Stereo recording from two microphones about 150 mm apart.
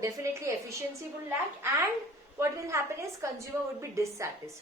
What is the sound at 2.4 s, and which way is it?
A woman's voice, 20° right (ahead or behind).